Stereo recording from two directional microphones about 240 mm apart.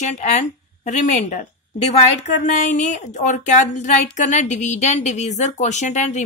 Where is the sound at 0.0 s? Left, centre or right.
Left.